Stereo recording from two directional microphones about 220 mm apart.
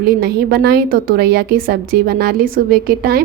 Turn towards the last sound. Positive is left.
turn(degrees=-45)  # may be behind; listen again after turning